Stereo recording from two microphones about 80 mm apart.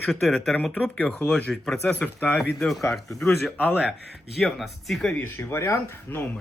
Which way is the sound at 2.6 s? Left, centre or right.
Centre.